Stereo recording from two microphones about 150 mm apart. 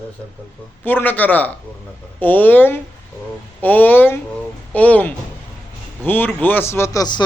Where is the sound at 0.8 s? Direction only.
15° left (ahead or behind).